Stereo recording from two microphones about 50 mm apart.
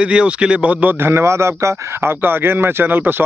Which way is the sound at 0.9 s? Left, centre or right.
Right.